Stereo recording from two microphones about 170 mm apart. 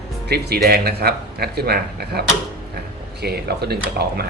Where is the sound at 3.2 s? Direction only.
70° right (ahead or behind).